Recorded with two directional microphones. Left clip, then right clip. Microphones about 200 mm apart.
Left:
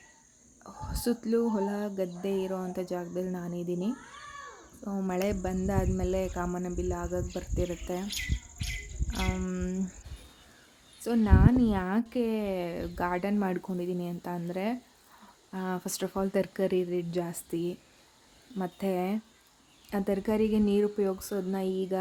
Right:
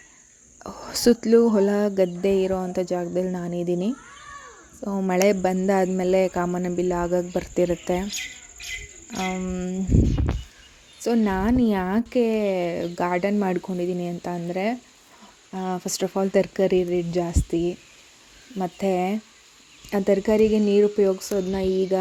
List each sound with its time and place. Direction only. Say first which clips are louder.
0.6 s a woman's voice: right 13 dB; 30° right (ahead or behind)
9.0 s a sound: right 7 dB; 20° right (ahead or behind)
9.3 s speech: right 6 dB; 10° right (ahead or behind)
11.0 s a woman's voice: right 6 dB; 20° right (ahead or behind)